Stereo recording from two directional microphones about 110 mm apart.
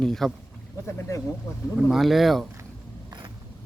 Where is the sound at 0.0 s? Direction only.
5° left (ahead or behind).